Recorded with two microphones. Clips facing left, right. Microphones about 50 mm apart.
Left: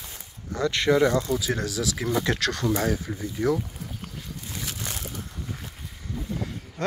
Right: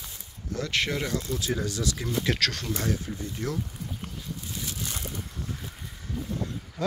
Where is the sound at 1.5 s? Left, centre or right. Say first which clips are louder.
Left 2 dB; left.